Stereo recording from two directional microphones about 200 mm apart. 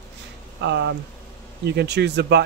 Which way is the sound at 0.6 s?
60° right (ahead or behind).